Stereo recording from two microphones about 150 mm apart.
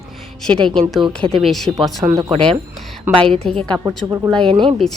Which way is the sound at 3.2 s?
35° right (ahead or behind).